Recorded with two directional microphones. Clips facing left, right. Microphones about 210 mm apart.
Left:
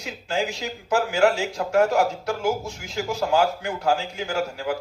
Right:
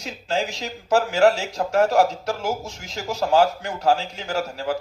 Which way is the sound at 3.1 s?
40° right (ahead or behind).